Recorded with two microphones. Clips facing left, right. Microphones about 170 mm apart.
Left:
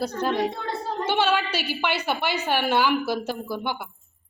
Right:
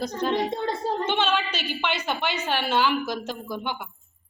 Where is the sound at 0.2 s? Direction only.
5° left (ahead or behind).